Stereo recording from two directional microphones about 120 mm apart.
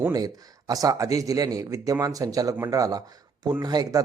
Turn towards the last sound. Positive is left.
turn(degrees=-30)  # may be behind; listen again after turning